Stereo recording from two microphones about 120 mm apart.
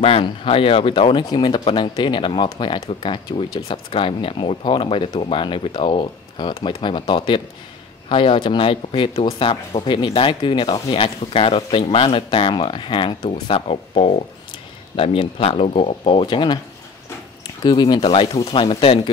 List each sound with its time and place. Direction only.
0.0 s speech: 50° left (ahead or behind)
6.5 s speech: 50° left (ahead or behind)
13.2 s speech: 55° left (ahead or behind)
17.6 s speech: 40° left (ahead or behind)